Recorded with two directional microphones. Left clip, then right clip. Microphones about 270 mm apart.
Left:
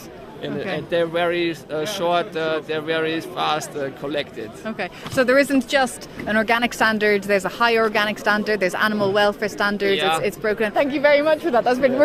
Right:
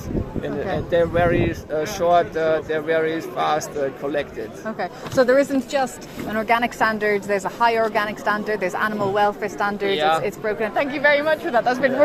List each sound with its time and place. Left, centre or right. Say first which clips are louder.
0.4 s speech: left 1 dB; left
4.6 s speech: even; left